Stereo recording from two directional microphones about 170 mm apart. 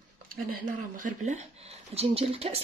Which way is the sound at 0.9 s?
45° right (ahead or behind).